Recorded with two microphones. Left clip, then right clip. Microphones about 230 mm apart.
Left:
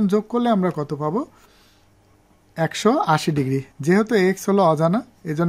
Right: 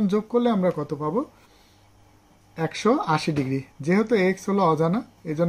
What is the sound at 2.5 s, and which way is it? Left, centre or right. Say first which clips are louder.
Speech: left 3 dB; left.